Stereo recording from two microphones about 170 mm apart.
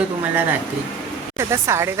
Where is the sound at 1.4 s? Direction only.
15° right (ahead or behind).